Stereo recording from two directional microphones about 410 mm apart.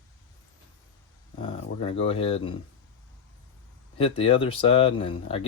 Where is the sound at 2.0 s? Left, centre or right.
Centre.